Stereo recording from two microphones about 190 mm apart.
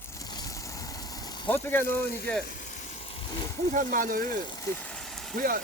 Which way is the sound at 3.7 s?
45° right (ahead or behind).